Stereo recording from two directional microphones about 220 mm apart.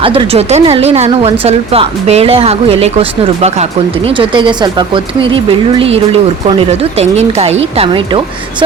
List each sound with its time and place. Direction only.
0.0 s a woman's voice: 25° right (ahead or behind)